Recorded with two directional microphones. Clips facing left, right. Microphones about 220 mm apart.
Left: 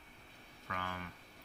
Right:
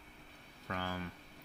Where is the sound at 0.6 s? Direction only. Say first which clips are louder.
Right 4 dB; 35° right (ahead or behind).